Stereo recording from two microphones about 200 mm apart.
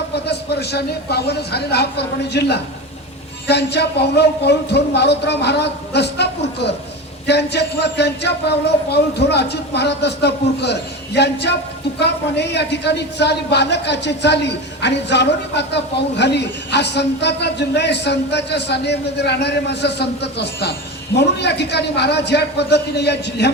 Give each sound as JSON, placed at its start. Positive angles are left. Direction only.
{"t": 0.3, "sound": "speech", "side_deg": 55}